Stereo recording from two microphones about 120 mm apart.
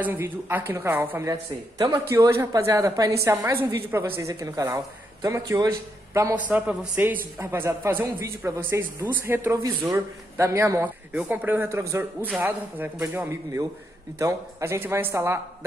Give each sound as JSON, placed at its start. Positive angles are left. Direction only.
{"t": 0.0, "sound": "a woman's voice", "side_deg": -15}
{"t": 6.3, "sound": "a man's voice", "side_deg": -15}
{"t": 11.1, "sound": "a man's voice", "side_deg": -10}